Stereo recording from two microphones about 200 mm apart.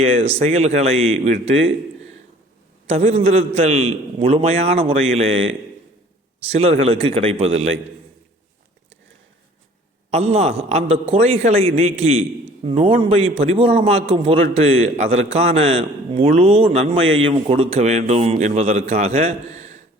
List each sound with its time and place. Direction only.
0.0 s speech: 30° right (ahead or behind)
2.9 s a man's voice: 30° right (ahead or behind)
6.4 s a man's voice: 30° right (ahead or behind)
10.1 s a man's voice: 30° right (ahead or behind)
17.0 s a man's voice: 75° right (ahead or behind)
17.2 s speech: 30° right (ahead or behind)